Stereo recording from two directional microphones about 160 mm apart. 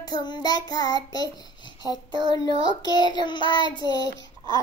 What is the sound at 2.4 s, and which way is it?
Child singing, 30° left (ahead or behind).